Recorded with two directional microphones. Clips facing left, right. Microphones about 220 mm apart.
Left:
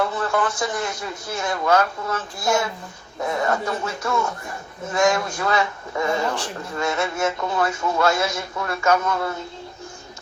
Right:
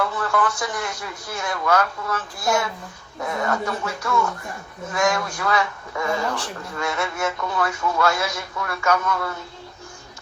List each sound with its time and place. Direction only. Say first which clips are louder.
0.0 s a man's voice: left 1 dB; 25° left (ahead or behind)